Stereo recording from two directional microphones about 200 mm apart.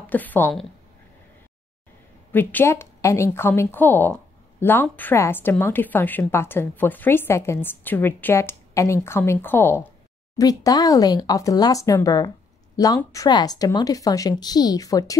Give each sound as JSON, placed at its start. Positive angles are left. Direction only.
{"t": 0.0, "sound": "a woman's voice", "side_deg": 10}
{"t": 2.3, "sound": "a woman's voice", "side_deg": 10}